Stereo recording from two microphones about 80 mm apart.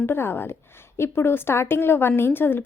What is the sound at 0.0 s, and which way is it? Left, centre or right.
A woman's voice, left.